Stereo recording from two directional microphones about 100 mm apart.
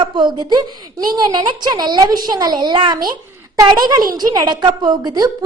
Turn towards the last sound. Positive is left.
turn(degrees=-40)  # may be behind; listen again after turning